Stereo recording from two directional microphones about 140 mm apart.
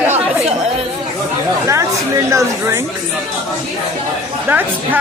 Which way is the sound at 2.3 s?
20° right (ahead or behind).